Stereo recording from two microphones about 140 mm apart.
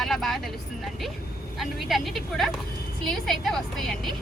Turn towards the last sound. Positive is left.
turn(degrees=5)  # may be behind; listen again after turning